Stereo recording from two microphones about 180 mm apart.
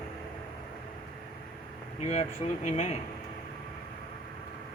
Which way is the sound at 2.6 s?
40° left (ahead or behind).